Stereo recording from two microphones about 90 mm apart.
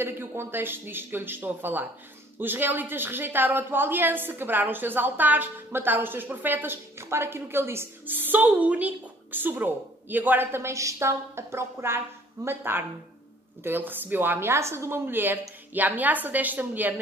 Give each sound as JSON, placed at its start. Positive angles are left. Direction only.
{"t": 0.0, "sound": "a woman's voice", "side_deg": -25}